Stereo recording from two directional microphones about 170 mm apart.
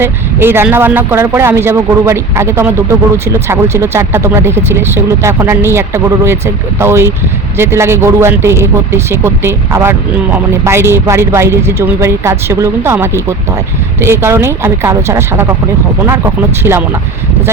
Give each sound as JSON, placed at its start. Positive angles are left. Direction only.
{"t": 0.0, "sound": "speech", "side_deg": -15}